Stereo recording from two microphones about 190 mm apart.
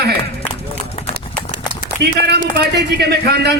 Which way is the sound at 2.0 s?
60° right (ahead or behind).